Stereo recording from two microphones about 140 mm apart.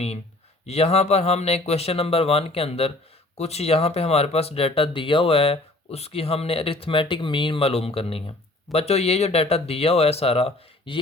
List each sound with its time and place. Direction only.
0.6 s speech: 50° left (ahead or behind)